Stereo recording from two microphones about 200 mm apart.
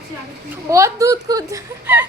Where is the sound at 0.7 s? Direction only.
15° right (ahead or behind).